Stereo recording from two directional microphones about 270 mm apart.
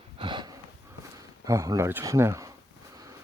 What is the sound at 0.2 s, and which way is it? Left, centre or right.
Snort, centre.